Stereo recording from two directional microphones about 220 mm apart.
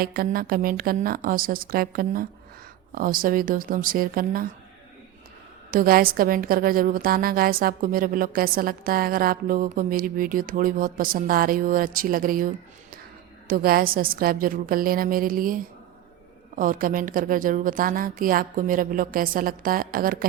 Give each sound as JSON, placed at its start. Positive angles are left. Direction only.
{"t": 0.0, "sound": "a woman's voice", "side_deg": -40}
{"t": 5.7, "sound": "a woman's voice", "side_deg": -40}